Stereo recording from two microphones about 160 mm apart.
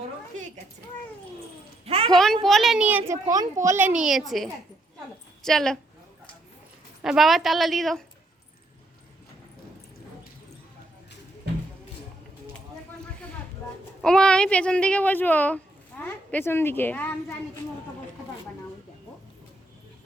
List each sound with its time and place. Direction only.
1.8 s a sound: 40° right (ahead or behind)
2.0 s a child's voice: centre (ahead or behind)
3.3 s a child's voice: 20° right (ahead or behind); by 4.4 s centre (ahead or behind)
5.5 s a child's voice: 5° left (ahead or behind)
7.0 s a child's voice: centre (ahead or behind)
14.0 s a child's voice: 5° left (ahead or behind)